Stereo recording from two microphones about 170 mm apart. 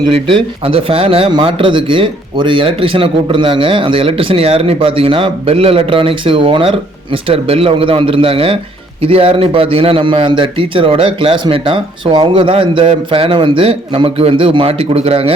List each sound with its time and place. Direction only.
0.1 s speech: 30° right (ahead or behind)